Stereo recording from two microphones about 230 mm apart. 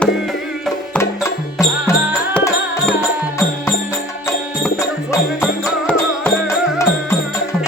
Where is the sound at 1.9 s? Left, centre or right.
Centre.